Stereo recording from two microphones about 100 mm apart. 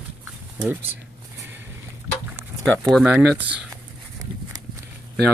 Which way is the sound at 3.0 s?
15° right (ahead or behind).